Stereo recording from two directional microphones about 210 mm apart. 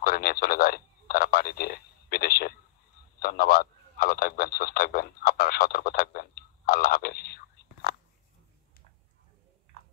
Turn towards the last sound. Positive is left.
turn(degrees=50)  # may be behind; listen again after turning